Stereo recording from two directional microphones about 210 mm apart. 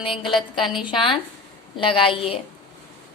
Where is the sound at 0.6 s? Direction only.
Centre (ahead or behind).